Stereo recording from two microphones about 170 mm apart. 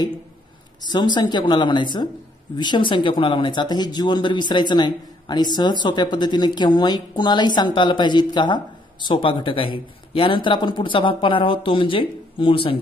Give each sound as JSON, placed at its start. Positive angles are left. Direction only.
{"t": 0.8, "sound": "speech", "side_deg": 25}